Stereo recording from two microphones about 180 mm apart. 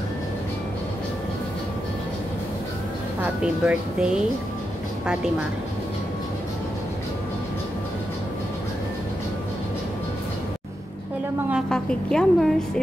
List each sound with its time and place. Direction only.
3.2 s speech: 10° right (ahead or behind)
11.5 s a woman's voice: 5° left (ahead or behind)